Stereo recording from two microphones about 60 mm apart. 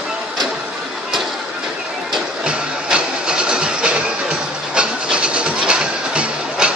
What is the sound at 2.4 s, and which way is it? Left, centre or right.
Vehicle, centre.